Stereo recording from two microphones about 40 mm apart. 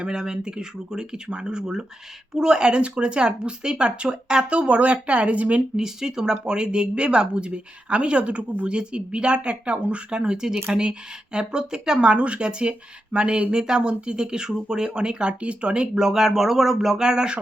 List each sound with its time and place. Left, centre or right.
0.0 s speech: centre; by 5.6 s right
5.7 s speech: centre